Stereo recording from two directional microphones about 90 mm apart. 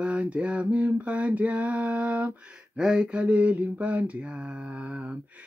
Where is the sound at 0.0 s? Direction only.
15° right (ahead or behind).